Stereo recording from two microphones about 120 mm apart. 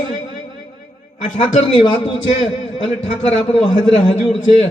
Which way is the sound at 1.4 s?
45° left (ahead or behind).